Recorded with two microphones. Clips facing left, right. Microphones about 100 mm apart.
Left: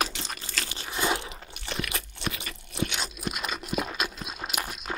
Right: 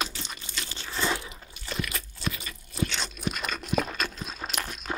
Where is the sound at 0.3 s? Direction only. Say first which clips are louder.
Left 3 dB; 80° left.